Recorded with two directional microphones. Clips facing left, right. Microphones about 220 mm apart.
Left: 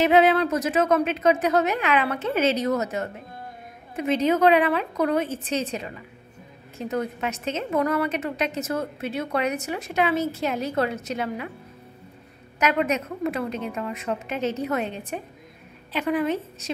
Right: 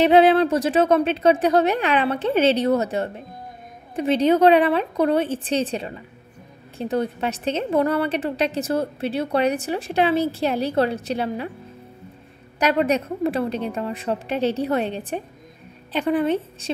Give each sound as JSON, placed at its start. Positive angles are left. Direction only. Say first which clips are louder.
{"t": 0.0, "sound": "a woman's voice", "louder": "right 4 dB", "side_deg": -30}
{"t": 12.5, "sound": "a woman's voice", "louder": "right 4 dB", "side_deg": -35}